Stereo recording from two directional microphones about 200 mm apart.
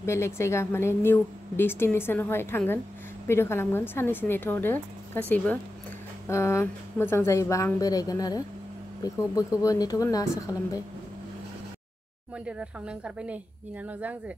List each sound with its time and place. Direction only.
0.0 s a woman's voice: 15° left (ahead or behind)
6.2 s a woman's voice: 15° left (ahead or behind)
12.4 s speech: 5° right (ahead or behind)